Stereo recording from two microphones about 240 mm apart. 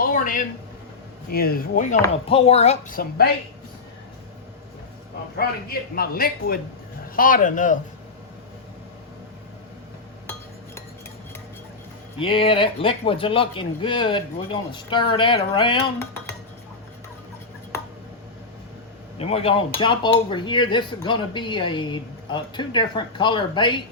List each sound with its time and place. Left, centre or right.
0.0 s a man's voice: left
5.4 s a man's voice: left
12.2 s speech: left
19.2 s speech: left